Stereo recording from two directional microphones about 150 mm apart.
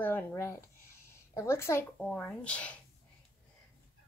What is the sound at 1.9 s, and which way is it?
Speech, 5° left (ahead or behind).